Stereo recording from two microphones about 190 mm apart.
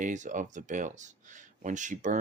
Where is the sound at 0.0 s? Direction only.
40° right (ahead or behind).